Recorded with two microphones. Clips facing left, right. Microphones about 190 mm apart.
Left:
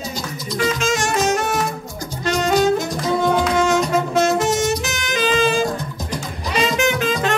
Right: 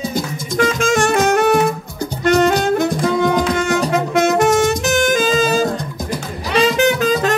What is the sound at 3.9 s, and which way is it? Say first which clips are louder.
Music: right 2 dB; 50° right (ahead or behind).